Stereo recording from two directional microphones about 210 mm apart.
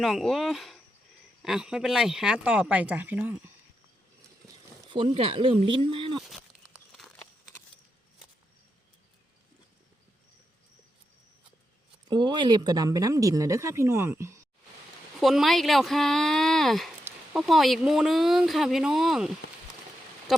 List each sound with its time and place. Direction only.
0.0 s speech: centre (ahead or behind)
4.9 s speech: 25° right (ahead or behind)
6.9 s a sound: centre (ahead or behind)
12.0 s speech: 20° right (ahead or behind)
15.2 s speech: centre (ahead or behind)